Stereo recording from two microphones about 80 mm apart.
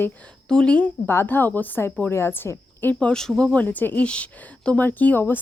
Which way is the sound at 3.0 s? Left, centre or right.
Centre.